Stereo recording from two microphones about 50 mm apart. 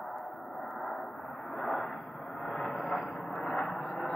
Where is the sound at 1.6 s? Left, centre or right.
Centre.